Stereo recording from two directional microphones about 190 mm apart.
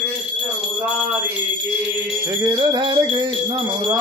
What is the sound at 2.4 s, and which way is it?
Music, 20° right (ahead or behind).